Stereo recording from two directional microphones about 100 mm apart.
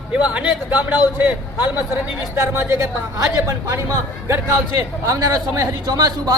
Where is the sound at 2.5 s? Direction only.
25° right (ahead or behind).